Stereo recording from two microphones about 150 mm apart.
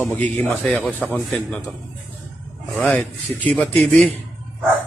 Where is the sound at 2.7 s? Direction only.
5° left (ahead or behind).